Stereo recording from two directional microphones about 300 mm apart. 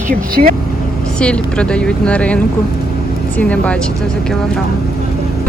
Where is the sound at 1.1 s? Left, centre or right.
Centre.